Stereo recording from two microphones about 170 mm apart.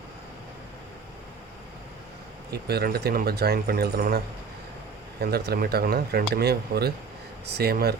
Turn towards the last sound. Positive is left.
turn(degrees=-65)  # may be behind; listen again after turning